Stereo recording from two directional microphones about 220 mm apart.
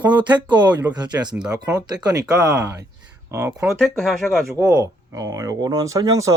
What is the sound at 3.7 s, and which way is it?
Speech, centre (ahead or behind).